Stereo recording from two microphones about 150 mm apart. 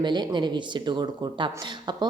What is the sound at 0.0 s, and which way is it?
A woman's voice, 30° right (ahead or behind).